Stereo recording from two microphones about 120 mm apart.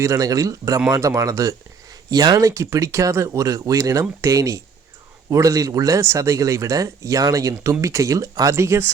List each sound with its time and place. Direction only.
0.0 s speech: 25° right (ahead or behind)